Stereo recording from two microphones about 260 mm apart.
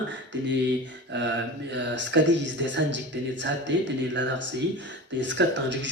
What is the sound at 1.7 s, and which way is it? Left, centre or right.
A man's voice, right.